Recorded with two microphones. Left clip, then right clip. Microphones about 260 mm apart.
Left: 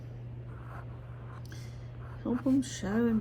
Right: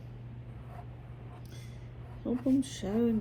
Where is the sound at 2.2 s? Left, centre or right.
Left.